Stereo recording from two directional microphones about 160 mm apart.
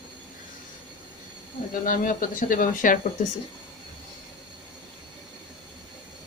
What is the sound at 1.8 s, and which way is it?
Speech, 55° left (ahead or behind).